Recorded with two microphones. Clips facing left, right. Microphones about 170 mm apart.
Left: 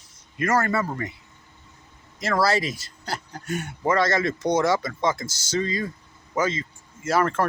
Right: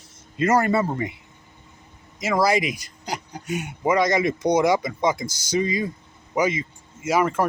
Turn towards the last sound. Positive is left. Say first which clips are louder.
# right 1 dB
turn(degrees=-10)  # may be behind; listen again after turning